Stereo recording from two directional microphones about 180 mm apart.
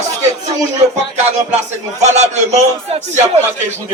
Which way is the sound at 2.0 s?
40° right (ahead or behind).